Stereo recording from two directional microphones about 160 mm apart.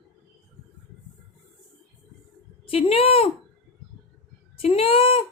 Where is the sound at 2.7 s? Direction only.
40° left (ahead or behind).